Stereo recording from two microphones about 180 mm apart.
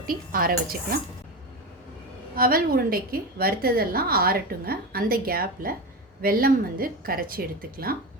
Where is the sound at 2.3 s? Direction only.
55° right (ahead or behind).